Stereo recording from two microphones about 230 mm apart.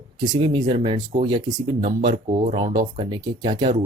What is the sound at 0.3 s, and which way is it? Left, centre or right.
Speech, right.